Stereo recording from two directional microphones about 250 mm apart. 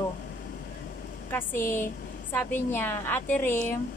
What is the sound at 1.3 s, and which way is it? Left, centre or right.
A woman's voice, centre.